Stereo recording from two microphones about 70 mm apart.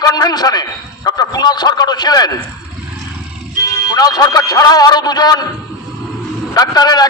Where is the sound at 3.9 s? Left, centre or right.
Left.